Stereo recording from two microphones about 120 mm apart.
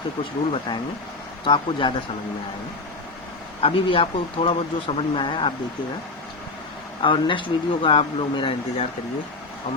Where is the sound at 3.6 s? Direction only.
50° left (ahead or behind).